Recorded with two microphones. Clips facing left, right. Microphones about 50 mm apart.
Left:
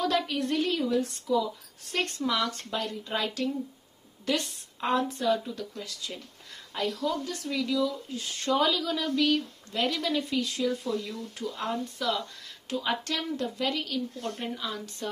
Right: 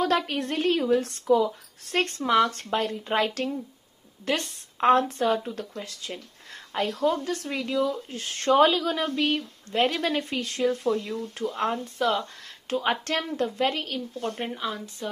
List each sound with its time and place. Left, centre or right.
0.0 s a woman's voice: right
14.5 s a woman's voice: right